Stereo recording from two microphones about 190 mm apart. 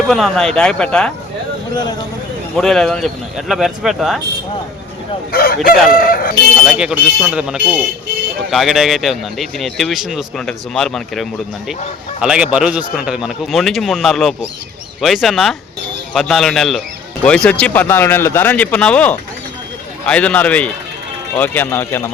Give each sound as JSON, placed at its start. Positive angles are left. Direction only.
{"t": 0.1, "sound": "speech", "side_deg": 0}
{"t": 2.6, "sound": "speech", "side_deg": 0}
{"t": 5.3, "sound": "crowing", "side_deg": 50}
{"t": 6.7, "sound": "speech", "side_deg": -5}